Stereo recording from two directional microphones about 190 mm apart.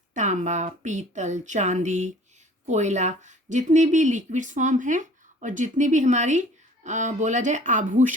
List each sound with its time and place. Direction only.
0.1 s speech: 40° right (ahead or behind)